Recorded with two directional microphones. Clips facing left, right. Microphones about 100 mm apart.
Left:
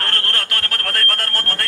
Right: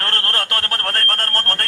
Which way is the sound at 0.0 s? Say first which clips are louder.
Right 1 dB; 30° right (ahead or behind).